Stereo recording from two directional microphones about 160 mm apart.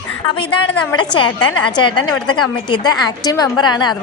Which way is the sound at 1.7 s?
30° left (ahead or behind).